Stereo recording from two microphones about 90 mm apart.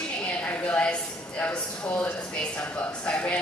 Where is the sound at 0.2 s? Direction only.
15° left (ahead or behind).